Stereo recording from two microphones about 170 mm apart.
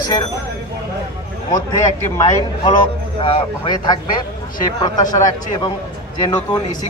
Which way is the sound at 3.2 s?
30° left (ahead or behind).